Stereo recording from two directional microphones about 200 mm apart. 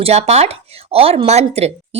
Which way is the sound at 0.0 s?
30° right (ahead or behind).